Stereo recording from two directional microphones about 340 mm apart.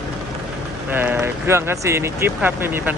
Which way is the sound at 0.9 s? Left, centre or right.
Centre.